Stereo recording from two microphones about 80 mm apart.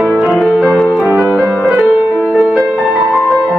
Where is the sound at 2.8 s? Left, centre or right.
Centre.